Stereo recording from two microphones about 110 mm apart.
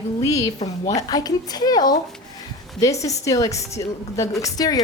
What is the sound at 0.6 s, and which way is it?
A woman's voice, 30° left (ahead or behind).